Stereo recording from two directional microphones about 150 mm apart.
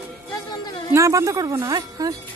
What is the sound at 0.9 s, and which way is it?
Speech, 20° right (ahead or behind).